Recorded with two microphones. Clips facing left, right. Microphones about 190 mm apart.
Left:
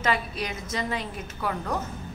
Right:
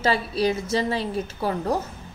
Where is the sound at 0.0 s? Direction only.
30° right (ahead or behind).